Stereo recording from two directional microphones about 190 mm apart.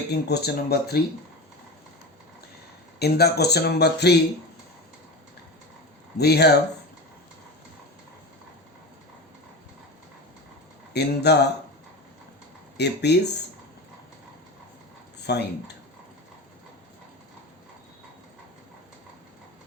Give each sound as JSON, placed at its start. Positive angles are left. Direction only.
{"t": 0.1, "sound": "speech", "side_deg": 60}
{"t": 3.0, "sound": "speech", "side_deg": 55}
{"t": 6.1, "sound": "speech", "side_deg": 60}
{"t": 10.9, "sound": "speech", "side_deg": 60}
{"t": 12.7, "sound": "speech", "side_deg": 60}
{"t": 15.3, "sound": "speech", "side_deg": 60}